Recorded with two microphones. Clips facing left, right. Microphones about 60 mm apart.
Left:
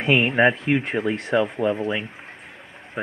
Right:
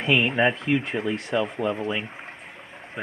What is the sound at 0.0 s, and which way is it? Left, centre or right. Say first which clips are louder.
Speech: left 3 dB; left.